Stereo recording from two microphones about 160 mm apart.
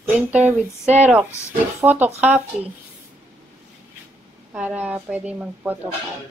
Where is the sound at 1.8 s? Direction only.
10° right (ahead or behind).